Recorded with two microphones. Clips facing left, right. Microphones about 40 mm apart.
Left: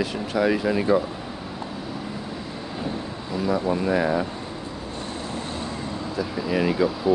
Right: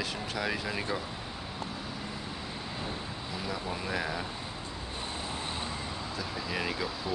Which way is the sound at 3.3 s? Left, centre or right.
Centre.